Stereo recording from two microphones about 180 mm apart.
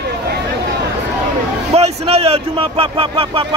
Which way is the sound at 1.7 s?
35° right (ahead or behind).